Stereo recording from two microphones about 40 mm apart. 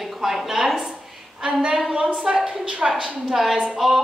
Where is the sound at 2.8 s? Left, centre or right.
Right.